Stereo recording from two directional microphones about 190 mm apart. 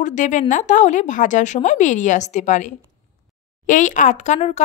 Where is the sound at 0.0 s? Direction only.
40° left (ahead or behind).